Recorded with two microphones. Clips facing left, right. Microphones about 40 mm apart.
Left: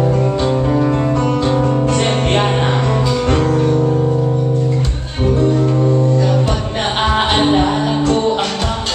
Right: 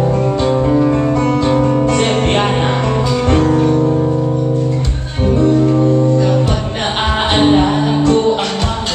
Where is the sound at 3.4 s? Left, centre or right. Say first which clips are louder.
Right 2 dB; centre.